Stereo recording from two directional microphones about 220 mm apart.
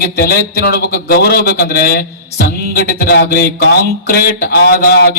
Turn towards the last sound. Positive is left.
turn(degrees=45)  # may be behind; listen again after turning